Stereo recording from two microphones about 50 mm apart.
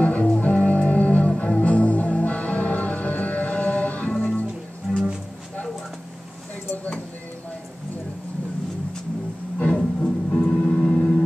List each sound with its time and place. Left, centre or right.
0.0 s music: left
6.7 s a sound: left
9.8 s music: left
10.5 s gong: centre